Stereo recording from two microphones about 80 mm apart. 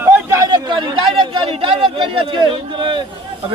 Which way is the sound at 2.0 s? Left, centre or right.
Right.